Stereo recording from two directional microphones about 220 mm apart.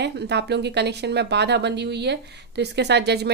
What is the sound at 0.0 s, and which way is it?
Speech, 50° right (ahead or behind).